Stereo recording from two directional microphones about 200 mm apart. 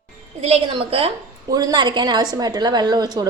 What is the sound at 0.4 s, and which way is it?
A woman's voice, 30° right (ahead or behind).